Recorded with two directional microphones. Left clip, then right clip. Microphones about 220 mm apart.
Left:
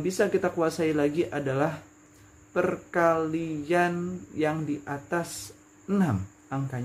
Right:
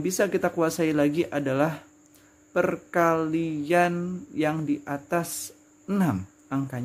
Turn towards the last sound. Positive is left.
turn(degrees=-50)  # may be behind; listen again after turning